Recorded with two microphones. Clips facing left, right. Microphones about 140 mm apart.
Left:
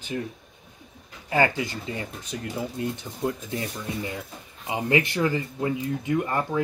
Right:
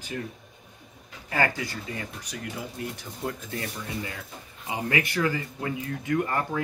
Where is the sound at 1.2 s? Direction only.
20° left (ahead or behind).